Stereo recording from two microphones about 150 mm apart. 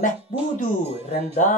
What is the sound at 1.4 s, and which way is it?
Speech, 55° left (ahead or behind).